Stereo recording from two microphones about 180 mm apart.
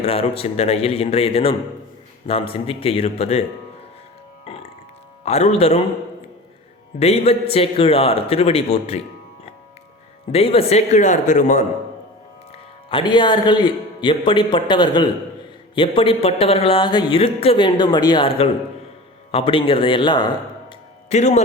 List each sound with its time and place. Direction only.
0.0 s a man's voice: 30° left (ahead or behind)
5.2 s a man's voice: 35° left (ahead or behind)
7.0 s a man's voice: 35° left (ahead or behind)
10.3 s a man's voice: 30° left (ahead or behind)
12.9 s speech: 25° left (ahead or behind)
21.1 s a man's voice: 40° left (ahead or behind)